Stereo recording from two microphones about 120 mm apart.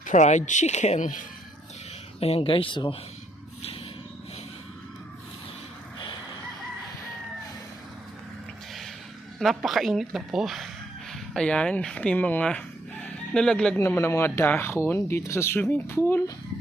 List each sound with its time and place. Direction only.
0.0 s speech: 80° left
2.2 s speech: 55° left (ahead or behind)
9.4 s speech: centre (ahead or behind)
13.7 s speech: 20° left (ahead or behind)